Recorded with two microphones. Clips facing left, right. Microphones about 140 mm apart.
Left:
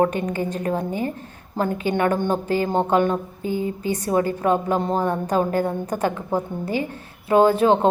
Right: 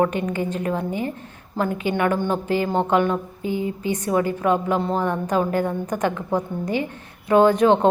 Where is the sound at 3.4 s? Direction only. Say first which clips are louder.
Even; 15° right (ahead or behind).